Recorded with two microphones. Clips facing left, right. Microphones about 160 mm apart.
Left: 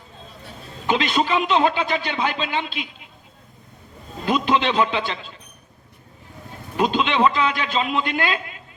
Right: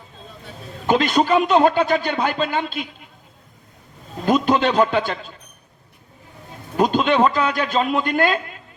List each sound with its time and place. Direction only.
0.9 s speech: 45° right (ahead or behind)
4.3 s a man's voice: 45° right (ahead or behind)
6.7 s speech: 45° right (ahead or behind)